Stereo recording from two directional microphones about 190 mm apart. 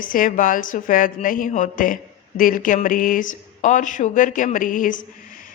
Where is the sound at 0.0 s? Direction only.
45° left (ahead or behind).